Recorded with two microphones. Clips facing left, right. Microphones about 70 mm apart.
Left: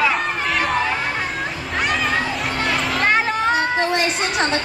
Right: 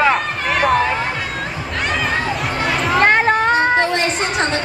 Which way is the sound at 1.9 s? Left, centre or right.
Centre.